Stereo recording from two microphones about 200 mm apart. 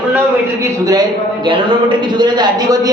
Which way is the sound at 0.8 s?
20° right (ahead or behind).